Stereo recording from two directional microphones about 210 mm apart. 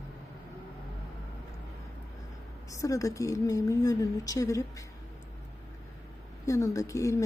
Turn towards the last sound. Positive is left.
turn(degrees=15)  # may be behind; listen again after turning